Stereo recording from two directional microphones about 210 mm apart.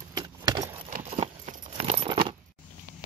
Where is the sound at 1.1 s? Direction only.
30° right (ahead or behind).